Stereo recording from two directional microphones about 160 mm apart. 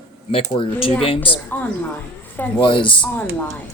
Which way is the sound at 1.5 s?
10° left (ahead or behind).